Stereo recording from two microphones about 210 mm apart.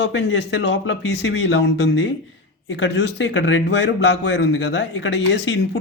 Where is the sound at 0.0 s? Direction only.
60° left (ahead or behind).